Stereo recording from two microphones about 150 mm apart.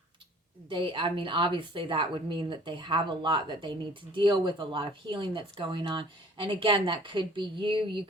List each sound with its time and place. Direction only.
0.7 s a woman's voice: 35° right (ahead or behind)